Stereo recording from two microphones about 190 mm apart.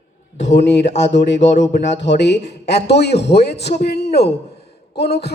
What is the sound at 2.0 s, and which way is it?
A man's voice, 65° left (ahead or behind).